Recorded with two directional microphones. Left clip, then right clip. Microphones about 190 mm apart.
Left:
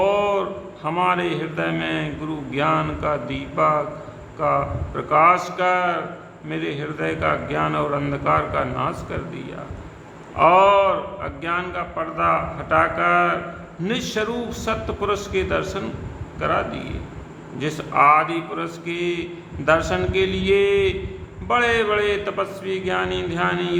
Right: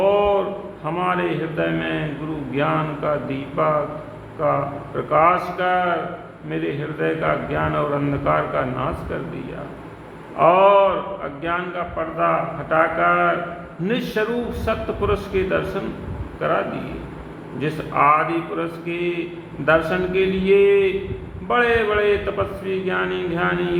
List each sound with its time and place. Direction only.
0.0 s a sound: 15° left (ahead or behind)
0.9 s a man's voice: 20° left (ahead or behind)
7.0 s a man's voice: 15° left (ahead or behind)
10.3 s a man's voice: 15° left (ahead or behind)